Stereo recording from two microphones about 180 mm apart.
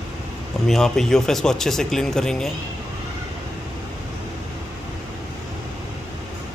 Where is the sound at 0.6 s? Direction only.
Centre (ahead or behind).